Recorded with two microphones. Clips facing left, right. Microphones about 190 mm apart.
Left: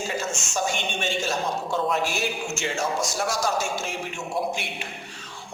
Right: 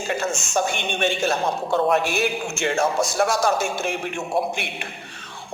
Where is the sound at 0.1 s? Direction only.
60° right (ahead or behind).